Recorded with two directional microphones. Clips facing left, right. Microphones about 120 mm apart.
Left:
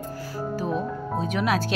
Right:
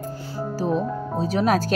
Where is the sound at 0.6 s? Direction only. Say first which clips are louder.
Right 6 dB; 35° right (ahead or behind).